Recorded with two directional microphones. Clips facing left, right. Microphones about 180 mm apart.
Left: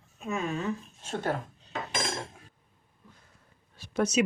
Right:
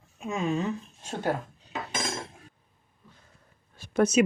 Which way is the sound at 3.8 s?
50° right (ahead or behind).